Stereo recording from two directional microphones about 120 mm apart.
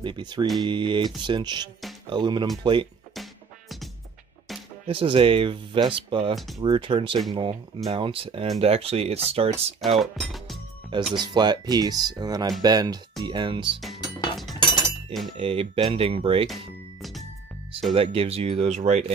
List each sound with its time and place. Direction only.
0.0 s speech: 40° right (ahead or behind)
4.8 s speech: 50° right (ahead or behind)
9.9 s music: centre (ahead or behind)
11.1 s speech: 35° right (ahead or behind)
14.5 s chink: 35° left (ahead or behind)
15.3 s speech: 55° right (ahead or behind)
17.9 s speech: 55° right (ahead or behind); by 19.1 s 80° right